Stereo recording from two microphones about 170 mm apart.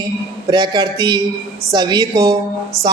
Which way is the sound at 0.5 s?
25° right (ahead or behind).